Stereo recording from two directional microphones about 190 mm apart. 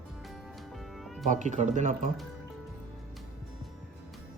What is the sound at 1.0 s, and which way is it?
Music, centre (ahead or behind).